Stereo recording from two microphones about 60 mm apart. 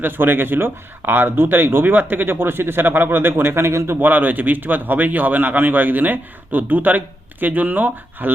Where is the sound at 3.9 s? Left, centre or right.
Right.